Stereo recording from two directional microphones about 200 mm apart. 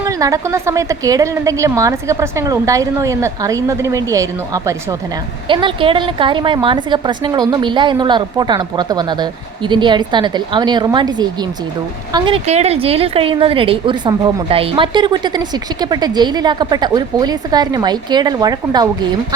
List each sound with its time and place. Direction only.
0.0 s a woman's voice: 15° right (ahead or behind)